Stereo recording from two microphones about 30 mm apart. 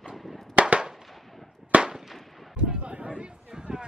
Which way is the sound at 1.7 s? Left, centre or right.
Right.